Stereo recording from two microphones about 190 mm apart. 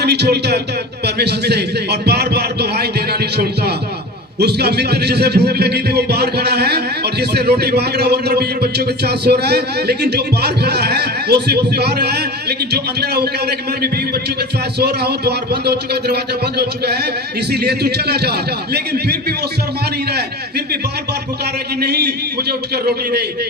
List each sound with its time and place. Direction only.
0.0 s a man's voice: 60° right (ahead or behind)
21.8 s a man's voice: 60° right (ahead or behind)